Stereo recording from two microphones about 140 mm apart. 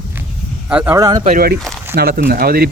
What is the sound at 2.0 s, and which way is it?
Speech, 90° right.